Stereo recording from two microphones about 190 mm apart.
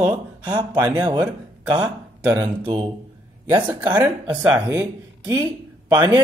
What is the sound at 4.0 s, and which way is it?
Speech, 5° right (ahead or behind).